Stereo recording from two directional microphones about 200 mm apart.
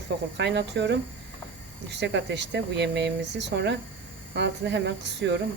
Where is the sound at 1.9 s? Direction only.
60° right (ahead or behind).